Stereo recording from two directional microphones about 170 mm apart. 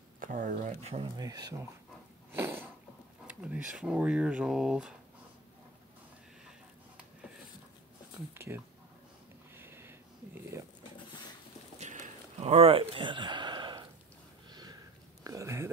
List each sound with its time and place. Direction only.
0.2 s speech: 50° right (ahead or behind)
1.0 s speech: 25° right (ahead or behind)
2.3 s a sound: 15° right (ahead or behind)
3.3 s speech: 5° right (ahead or behind)
8.4 s speech: 15° right (ahead or behind)
9.6 s a sound: 15° right (ahead or behind)
10.5 s speech: 15° right (ahead or behind)
11.8 s a sound: 45° right (ahead or behind); by 13.8 s 25° right (ahead or behind)
14.5 s sniff: 25° right (ahead or behind)
15.2 s speech: 20° right (ahead or behind)